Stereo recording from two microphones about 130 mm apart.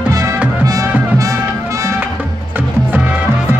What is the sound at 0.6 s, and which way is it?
Music, 30° right (ahead or behind).